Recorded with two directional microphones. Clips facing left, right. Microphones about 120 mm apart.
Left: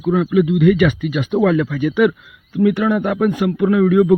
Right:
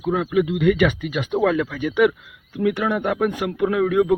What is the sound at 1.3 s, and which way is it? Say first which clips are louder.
Speech: left 4 dB; 10° right (ahead or behind).